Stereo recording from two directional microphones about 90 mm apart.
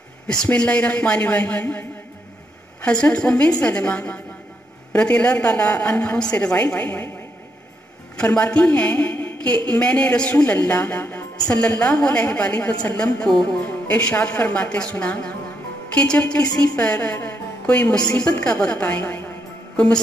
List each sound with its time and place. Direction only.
0.4 s a woman's voice: 10° left (ahead or behind)
8.2 s a woman's voice: 15° left (ahead or behind)